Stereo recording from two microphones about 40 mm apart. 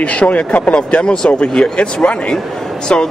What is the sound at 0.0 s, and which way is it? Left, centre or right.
Speech, left.